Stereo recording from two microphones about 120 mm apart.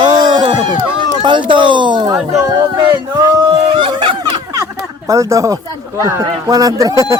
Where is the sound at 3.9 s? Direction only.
35° right (ahead or behind).